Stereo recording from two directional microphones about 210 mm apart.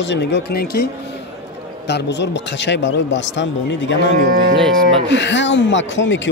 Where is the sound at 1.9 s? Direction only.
55° left (ahead or behind).